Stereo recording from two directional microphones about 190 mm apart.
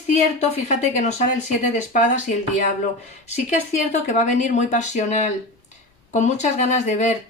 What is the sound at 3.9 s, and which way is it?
Speech, 35° left (ahead or behind).